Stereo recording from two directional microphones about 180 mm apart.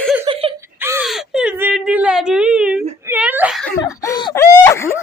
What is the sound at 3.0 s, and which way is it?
Wail, 10° right (ahead or behind).